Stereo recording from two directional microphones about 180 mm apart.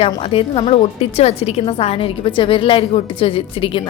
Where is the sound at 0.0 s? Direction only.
30° left (ahead or behind).